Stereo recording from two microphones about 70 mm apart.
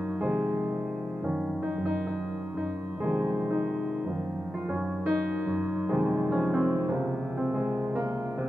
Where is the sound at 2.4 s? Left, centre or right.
Centre.